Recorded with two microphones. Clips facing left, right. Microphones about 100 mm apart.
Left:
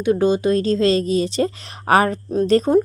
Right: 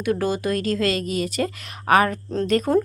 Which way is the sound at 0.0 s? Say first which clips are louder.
Left 6 dB; 25° left (ahead or behind).